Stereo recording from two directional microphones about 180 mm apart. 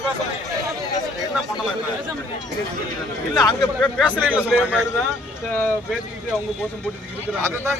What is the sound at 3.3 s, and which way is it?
Speech, 20° left (ahead or behind).